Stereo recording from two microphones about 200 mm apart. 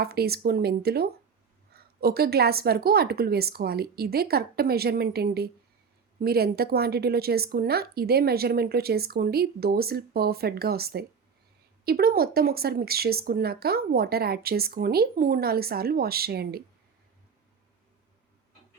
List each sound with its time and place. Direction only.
0.0 s speech: 50° right (ahead or behind)